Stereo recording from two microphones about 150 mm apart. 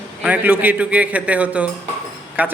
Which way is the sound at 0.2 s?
10° right (ahead or behind).